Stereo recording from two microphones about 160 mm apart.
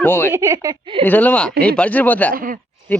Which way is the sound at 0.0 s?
15° left (ahead or behind).